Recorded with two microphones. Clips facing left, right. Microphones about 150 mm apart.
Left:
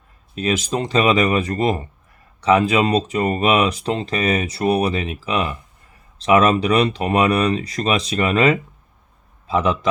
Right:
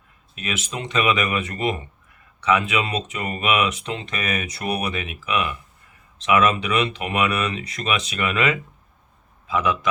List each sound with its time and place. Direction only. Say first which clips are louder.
0.3 s speech: left 9 dB; 35° left (ahead or behind)